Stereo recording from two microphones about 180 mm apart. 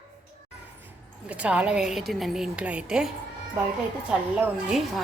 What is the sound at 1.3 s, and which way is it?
Speech, 5° right (ahead or behind).